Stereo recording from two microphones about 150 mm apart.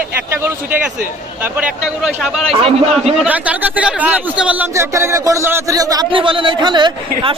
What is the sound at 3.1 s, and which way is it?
A man's voice, 10° right (ahead or behind).